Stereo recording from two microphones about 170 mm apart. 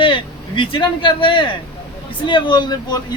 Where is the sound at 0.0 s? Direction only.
30° left (ahead or behind).